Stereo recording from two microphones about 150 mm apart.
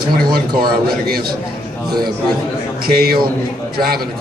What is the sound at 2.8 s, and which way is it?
Speech, 90° right.